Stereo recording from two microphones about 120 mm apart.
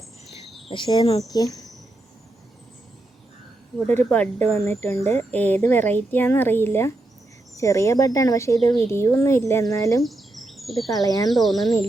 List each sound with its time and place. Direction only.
0.7 s speech: 40° left (ahead or behind)
3.8 s speech: 15° left (ahead or behind)
10.0 s bird: centre (ahead or behind)
10.8 s speech: 30° left (ahead or behind)
11.3 s speech: centre (ahead or behind)